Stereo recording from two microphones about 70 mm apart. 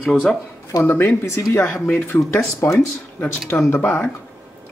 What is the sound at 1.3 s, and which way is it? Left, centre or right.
Speech, left.